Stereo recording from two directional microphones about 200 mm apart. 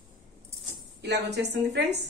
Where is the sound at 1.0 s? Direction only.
55° right (ahead or behind).